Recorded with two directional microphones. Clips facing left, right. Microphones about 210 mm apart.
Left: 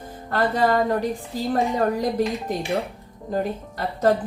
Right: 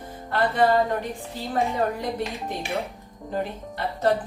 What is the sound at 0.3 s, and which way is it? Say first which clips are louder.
Speech: left 2 dB; 45° left (ahead or behind).